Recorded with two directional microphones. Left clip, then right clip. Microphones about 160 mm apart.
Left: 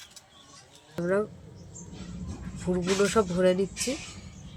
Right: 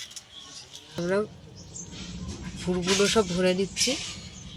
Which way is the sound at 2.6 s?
Centre (ahead or behind).